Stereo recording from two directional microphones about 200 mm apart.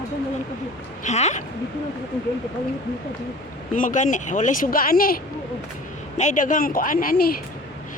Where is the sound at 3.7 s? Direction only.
40° left (ahead or behind).